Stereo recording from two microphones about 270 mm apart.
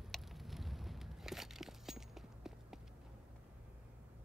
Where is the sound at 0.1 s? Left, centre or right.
Centre.